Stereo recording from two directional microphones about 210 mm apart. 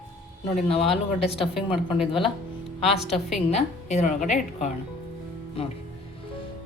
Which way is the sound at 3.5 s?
35° left (ahead or behind).